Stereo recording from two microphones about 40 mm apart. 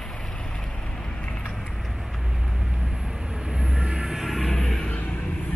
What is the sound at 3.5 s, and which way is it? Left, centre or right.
Vehicle, right.